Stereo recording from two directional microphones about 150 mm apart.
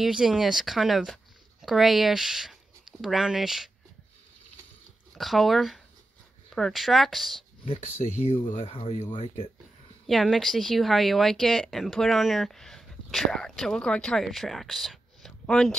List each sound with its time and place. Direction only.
0.0 s speech: 5° right (ahead or behind)
5.1 s speech: centre (ahead or behind)
8.0 s speech: 55° left (ahead or behind)
8.7 s speech: 40° left (ahead or behind)
9.2 s speech: 50° left (ahead or behind)
10.0 s speech: centre (ahead or behind)